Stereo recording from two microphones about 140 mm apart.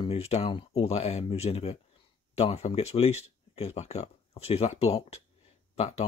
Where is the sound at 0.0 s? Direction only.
45° left (ahead or behind).